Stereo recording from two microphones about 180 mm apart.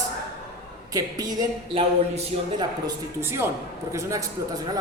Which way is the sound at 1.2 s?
20° right (ahead or behind).